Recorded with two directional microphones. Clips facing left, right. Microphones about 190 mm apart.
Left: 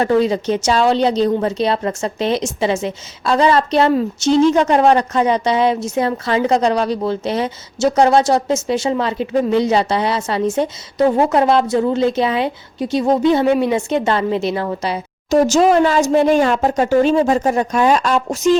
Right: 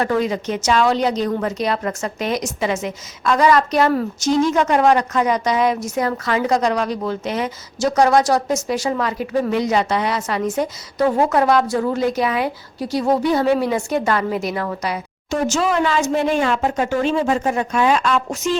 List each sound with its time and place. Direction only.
0.0 s a woman's voice: 30° left (ahead or behind)